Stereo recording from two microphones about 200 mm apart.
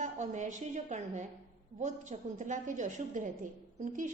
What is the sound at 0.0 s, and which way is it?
A woman's voice, 35° right (ahead or behind).